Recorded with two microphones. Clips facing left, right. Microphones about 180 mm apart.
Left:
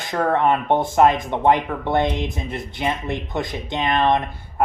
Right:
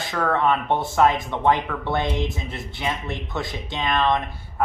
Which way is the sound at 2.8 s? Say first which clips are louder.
Left 4 dB; 20° left (ahead or behind).